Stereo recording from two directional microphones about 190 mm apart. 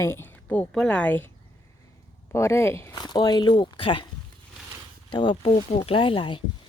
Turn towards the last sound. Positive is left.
turn(degrees=25)  # may be behind; listen again after turning